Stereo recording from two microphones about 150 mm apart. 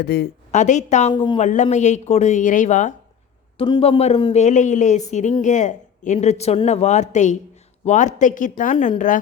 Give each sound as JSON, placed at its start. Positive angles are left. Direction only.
{"t": 0.0, "sound": "speech", "side_deg": 90}
{"t": 0.5, "sound": "speech", "side_deg": 50}
{"t": 1.1, "sound": "a woman's voice", "side_deg": 30}
{"t": 1.4, "sound": "speech", "side_deg": 55}
{"t": 3.6, "sound": "speech", "side_deg": 40}